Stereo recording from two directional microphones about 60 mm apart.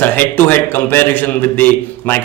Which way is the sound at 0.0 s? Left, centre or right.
Left.